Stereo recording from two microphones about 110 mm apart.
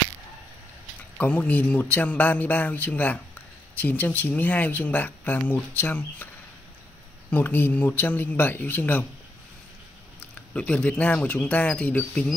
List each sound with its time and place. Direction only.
1.1 s speech: 15° left (ahead or behind)
7.2 s speech: 15° left (ahead or behind)
10.5 s speech: 10° left (ahead or behind)